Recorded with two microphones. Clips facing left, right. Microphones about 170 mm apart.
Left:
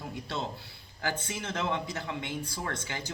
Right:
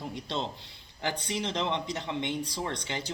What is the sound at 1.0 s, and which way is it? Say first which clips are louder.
Speech: right 2 dB; 15° right (ahead or behind).